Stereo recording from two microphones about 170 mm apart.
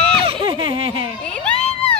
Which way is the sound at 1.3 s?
5° left (ahead or behind).